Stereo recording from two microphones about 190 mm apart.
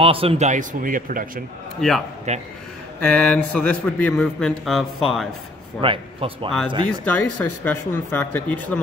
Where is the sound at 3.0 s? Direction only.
10° left (ahead or behind).